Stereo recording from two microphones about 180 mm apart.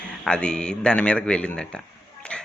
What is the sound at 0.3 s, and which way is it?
Speech, 5° left (ahead or behind).